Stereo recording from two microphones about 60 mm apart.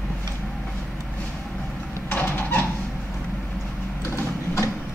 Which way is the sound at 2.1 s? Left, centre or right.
Left.